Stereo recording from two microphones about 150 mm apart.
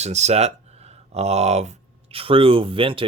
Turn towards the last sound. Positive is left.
turn(degrees=-35)  # may be behind; listen again after turning